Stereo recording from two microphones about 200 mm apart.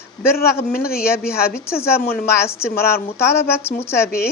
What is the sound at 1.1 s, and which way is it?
Speech, 50° left (ahead or behind).